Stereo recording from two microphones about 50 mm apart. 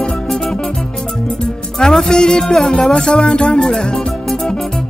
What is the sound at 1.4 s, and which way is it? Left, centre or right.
Music, centre.